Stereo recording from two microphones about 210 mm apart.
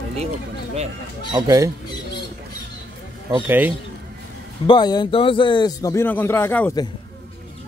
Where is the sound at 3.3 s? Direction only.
10° right (ahead or behind).